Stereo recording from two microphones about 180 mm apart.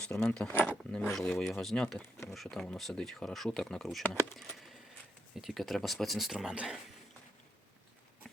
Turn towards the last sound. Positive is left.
turn(degrees=-5)  # may be behind; listen again after turning